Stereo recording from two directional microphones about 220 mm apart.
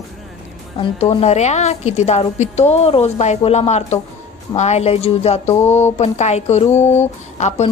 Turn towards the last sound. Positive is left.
turn(degrees=30)  # may be behind; listen again after turning